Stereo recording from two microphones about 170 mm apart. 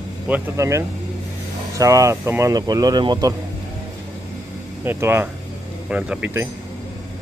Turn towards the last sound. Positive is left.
turn(degrees=-10)  # may be behind; listen again after turning